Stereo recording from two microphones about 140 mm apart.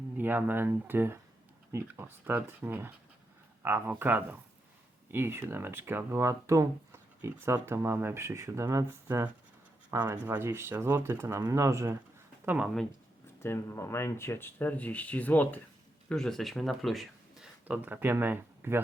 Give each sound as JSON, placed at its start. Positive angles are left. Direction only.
{"t": 0.2, "sound": "speech", "side_deg": -15}
{"t": 12.5, "sound": "speech", "side_deg": -10}
{"t": 13.4, "sound": "speech", "side_deg": 20}